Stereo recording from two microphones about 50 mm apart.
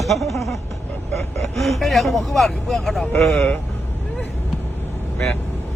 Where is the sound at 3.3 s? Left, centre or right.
Left.